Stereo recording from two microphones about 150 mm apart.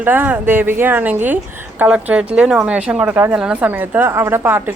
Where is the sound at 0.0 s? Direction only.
10° right (ahead or behind).